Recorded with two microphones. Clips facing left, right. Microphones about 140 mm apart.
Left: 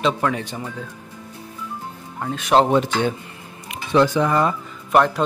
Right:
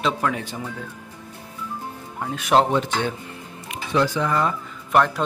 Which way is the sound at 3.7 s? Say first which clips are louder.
Left 4 dB; 20° left (ahead or behind).